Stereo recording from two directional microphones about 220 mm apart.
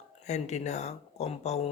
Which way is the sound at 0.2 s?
30° left (ahead or behind).